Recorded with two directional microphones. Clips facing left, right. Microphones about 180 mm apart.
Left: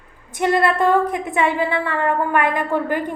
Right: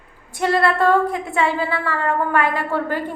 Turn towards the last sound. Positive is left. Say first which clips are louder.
# left 2 dB
turn(degrees=15)  # may be behind; listen again after turning